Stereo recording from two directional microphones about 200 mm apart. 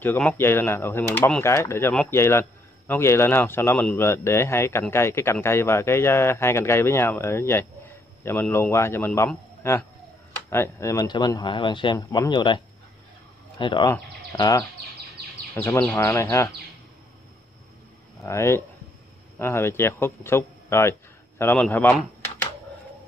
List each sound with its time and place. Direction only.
0.0 s speech: 10° left (ahead or behind)
18.2 s speech: 15° left (ahead or behind)